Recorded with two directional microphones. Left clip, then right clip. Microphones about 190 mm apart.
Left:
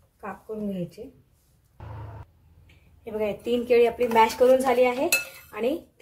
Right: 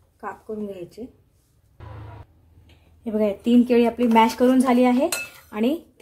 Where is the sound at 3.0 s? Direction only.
50° right (ahead or behind).